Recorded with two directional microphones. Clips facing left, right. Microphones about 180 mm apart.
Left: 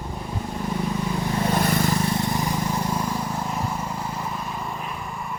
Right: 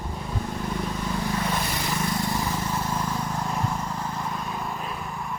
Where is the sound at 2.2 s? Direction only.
15° left (ahead or behind); by 5.3 s centre (ahead or behind).